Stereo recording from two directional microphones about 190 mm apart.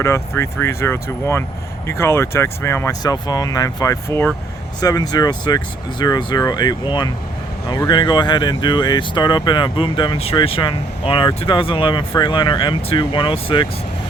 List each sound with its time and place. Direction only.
0.0 s speech: 15° left (ahead or behind)